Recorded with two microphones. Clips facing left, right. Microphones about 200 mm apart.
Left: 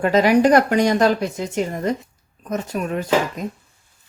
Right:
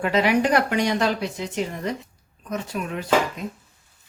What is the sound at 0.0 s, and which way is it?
Speech, 40° left (ahead or behind).